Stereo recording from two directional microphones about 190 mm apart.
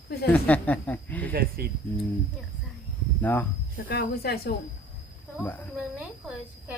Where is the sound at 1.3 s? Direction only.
50° right (ahead or behind).